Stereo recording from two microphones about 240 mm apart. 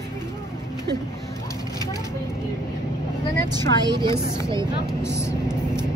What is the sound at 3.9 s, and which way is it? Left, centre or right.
Speech, centre.